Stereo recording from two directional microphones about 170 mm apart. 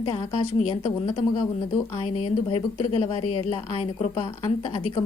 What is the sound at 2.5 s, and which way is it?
A woman's voice, 35° left (ahead or behind).